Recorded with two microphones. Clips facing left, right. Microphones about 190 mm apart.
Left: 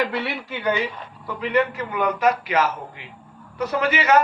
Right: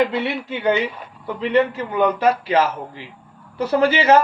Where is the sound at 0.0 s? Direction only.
20° right (ahead or behind).